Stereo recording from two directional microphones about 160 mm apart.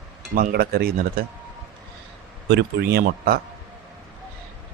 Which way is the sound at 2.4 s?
90° right.